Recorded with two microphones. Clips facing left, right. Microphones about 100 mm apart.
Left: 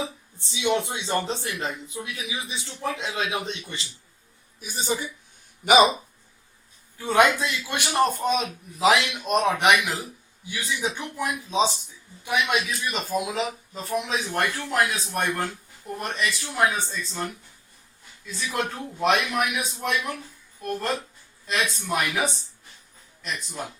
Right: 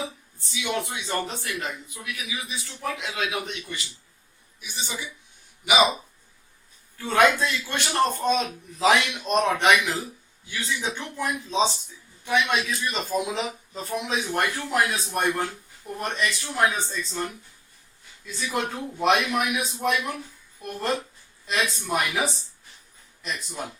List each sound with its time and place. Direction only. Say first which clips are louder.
0.3 s speech: left 5 dB; 25° left (ahead or behind)
4.6 s a woman's voice: left 7 dB; 40° left (ahead or behind)
7.0 s a man's voice: even; 15° left (ahead or behind); by 17.2 s centre (ahead or behind)
18.3 s speech: even; centre (ahead or behind)